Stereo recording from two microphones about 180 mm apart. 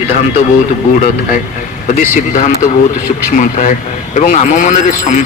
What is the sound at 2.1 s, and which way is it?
A man's voice, 45° left (ahead or behind).